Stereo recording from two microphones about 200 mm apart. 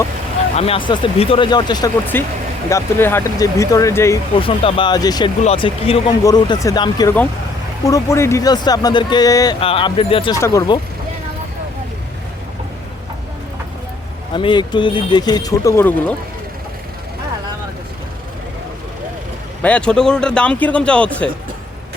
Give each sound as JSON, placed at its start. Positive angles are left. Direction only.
{"t": 0.5, "sound": "speech", "side_deg": 30}
{"t": 2.1, "sound": "speech", "side_deg": 10}
{"t": 4.4, "sound": "speech", "side_deg": 25}
{"t": 10.4, "sound": "speech", "side_deg": 15}
{"t": 14.3, "sound": "speech", "side_deg": 25}
{"t": 19.6, "sound": "speech", "side_deg": 5}